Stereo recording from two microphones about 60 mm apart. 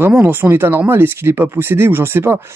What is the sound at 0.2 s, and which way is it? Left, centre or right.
Speech, right.